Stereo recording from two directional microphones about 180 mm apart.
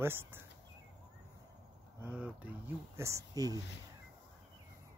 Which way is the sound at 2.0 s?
10° right (ahead or behind).